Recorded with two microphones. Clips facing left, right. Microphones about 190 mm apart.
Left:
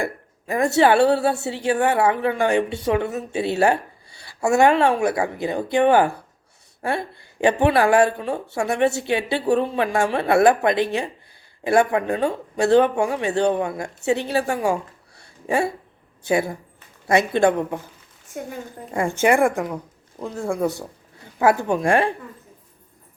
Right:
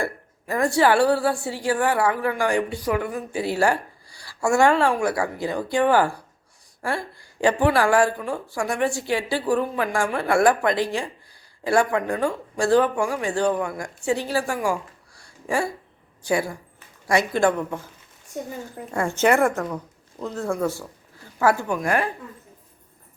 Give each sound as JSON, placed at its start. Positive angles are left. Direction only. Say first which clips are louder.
{"t": 0.0, "sound": "a woman's voice", "louder": "left 1 dB", "side_deg": 20}
{"t": 18.9, "sound": "a woman's voice", "louder": "left 1 dB", "side_deg": 15}